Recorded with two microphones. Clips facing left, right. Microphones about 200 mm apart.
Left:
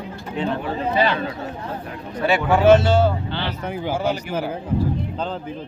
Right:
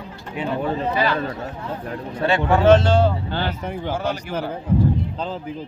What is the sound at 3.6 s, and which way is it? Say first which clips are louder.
Speech: left 2 dB; 5° left (ahead or behind).